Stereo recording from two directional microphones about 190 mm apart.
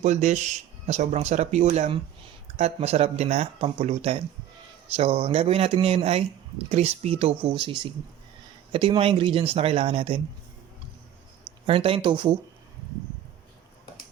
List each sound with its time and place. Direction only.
0.0 s speech: 35° right (ahead or behind)
11.6 s speech: 30° right (ahead or behind)